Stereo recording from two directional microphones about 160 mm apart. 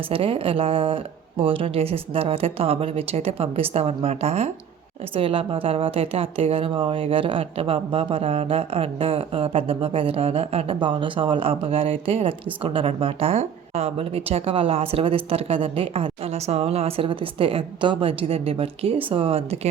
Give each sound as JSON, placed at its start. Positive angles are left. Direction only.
{"t": 0.1, "sound": "a woman's voice", "side_deg": -35}